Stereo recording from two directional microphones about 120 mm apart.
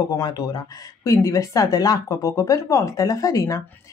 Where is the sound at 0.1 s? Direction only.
30° left (ahead or behind).